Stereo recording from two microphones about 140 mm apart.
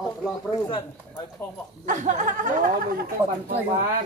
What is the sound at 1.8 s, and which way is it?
Speech, 60° right (ahead or behind).